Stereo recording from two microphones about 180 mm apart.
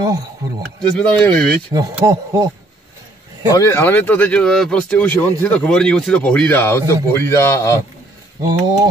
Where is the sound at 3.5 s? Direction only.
15° left (ahead or behind).